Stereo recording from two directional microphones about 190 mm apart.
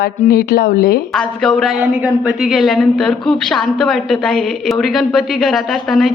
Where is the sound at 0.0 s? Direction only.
50° left (ahead or behind).